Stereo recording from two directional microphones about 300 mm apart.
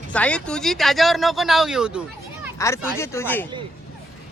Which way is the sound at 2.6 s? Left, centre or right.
Centre.